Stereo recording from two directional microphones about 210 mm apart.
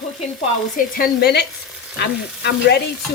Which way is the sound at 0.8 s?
45° left (ahead or behind).